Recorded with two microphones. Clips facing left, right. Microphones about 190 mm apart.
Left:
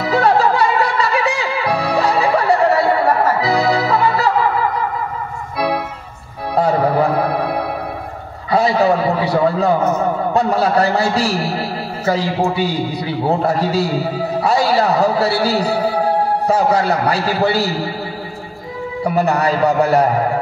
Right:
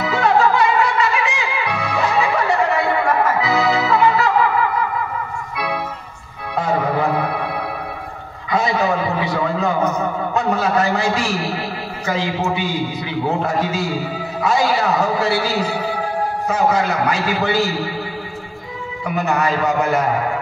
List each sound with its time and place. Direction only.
0.0 s music: 35° left (ahead or behind)
6.5 s music: 35° left (ahead or behind)
8.5 s a sound: 35° left (ahead or behind)
10.3 s a man's voice: 35° left (ahead or behind)
19.0 s a man's voice: 35° left (ahead or behind)